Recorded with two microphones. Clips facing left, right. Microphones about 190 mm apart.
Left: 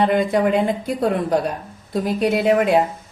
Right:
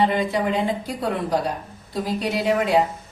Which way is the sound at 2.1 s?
55° left (ahead or behind).